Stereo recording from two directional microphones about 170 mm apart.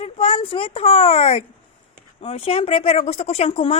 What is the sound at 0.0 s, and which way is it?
Speech, 30° left (ahead or behind).